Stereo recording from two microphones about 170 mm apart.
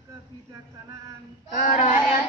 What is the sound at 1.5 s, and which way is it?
Speech, 45° left (ahead or behind).